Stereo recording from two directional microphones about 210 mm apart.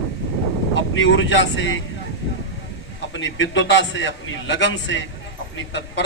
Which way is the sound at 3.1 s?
65° left (ahead or behind).